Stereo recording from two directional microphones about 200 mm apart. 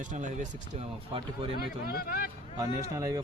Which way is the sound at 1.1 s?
25° right (ahead or behind).